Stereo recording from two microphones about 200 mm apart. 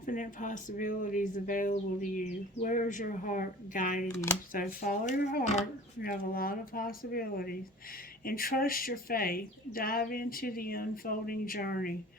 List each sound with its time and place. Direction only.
0.0 s speech: 40° left (ahead or behind)
4.1 s speech: 15° left (ahead or behind)
4.5 s speech: 45° left (ahead or behind)